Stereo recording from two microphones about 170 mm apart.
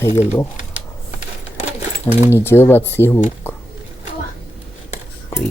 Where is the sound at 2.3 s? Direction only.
15° left (ahead or behind).